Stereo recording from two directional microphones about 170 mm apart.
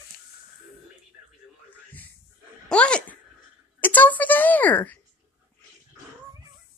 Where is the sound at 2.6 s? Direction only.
5° left (ahead or behind).